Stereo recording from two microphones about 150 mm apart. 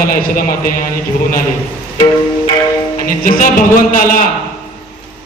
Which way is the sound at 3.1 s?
65° left (ahead or behind).